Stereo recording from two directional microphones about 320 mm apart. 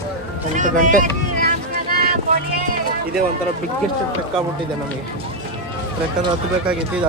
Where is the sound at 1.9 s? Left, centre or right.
Right.